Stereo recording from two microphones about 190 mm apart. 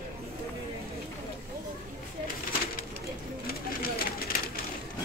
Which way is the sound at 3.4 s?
50° left (ahead or behind).